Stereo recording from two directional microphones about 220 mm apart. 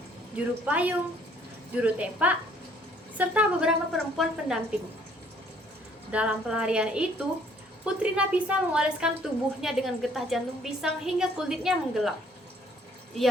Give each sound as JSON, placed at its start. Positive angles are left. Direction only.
{"t": 0.3, "sound": "a woman's voice", "side_deg": -5}
{"t": 6.1, "sound": "a woman's voice", "side_deg": -5}